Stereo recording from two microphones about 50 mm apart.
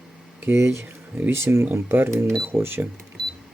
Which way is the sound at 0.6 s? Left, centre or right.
Right.